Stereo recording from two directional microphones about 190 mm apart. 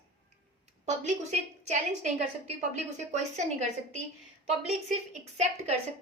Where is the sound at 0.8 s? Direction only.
35° right (ahead or behind).